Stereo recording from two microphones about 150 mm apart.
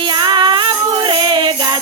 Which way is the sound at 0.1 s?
30° right (ahead or behind).